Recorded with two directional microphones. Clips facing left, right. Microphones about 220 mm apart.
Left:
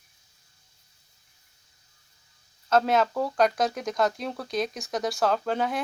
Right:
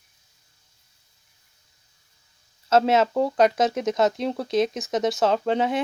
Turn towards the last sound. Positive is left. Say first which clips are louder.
# right 4 dB
turn(degrees=-25)  # may be behind; listen again after turning